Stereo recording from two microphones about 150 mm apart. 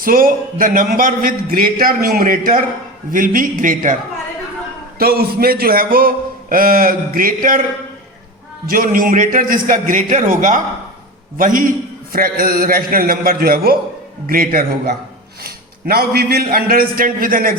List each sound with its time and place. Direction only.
0.0 s a man's voice: 70° right (ahead or behind)
4.9 s a man's voice: 85° right; by 7.3 s 70° right (ahead or behind)
8.6 s a man's voice: 70° right (ahead or behind)
15.4 s a man's voice: 90° right; by 17.5 s 70° right (ahead or behind)